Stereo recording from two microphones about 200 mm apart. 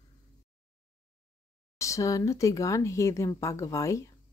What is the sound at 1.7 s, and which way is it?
Speech, 15° left (ahead or behind).